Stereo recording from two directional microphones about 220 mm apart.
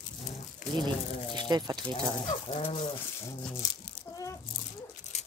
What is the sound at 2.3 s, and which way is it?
Bird, 25° left (ahead or behind).